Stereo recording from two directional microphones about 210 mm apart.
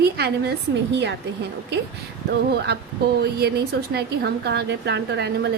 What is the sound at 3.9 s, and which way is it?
A woman's voice, 50° right (ahead or behind).